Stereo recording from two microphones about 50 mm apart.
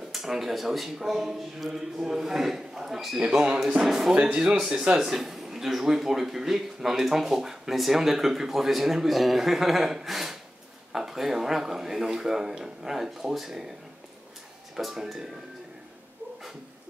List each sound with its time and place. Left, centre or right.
0.1 s speech: centre
3.2 s speech: centre
3.7 s speech: centre
4.1 s a man's voice: centre
14.8 s speech: centre